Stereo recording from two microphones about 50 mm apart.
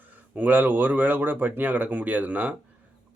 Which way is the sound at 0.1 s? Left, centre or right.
Right.